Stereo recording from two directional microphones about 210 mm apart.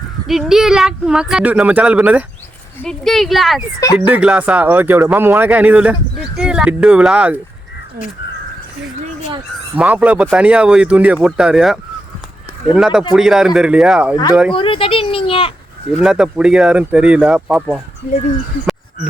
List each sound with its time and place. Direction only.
0.3 s speech: centre (ahead or behind)
9.7 s speech: 5° right (ahead or behind)
14.5 s speech: 25° left (ahead or behind)
16.0 s speech: 5° right (ahead or behind)